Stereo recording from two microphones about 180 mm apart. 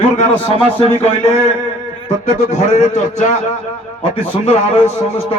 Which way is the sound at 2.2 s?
40° left (ahead or behind).